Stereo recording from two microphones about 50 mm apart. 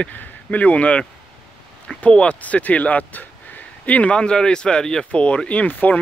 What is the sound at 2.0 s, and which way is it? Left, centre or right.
Speech, left.